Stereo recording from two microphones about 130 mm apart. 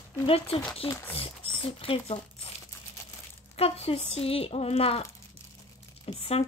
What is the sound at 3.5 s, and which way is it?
Speech, 50° left (ahead or behind).